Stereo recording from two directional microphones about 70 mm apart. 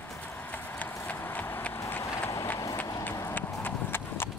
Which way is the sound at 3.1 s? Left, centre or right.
Left.